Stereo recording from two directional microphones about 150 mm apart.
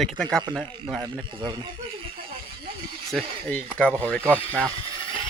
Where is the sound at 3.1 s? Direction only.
5° left (ahead or behind).